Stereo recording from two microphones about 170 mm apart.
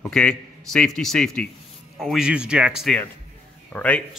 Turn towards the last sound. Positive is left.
turn(degrees=10)  # may be behind; listen again after turning